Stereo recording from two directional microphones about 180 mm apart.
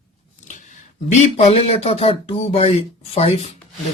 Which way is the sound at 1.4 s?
35° left (ahead or behind).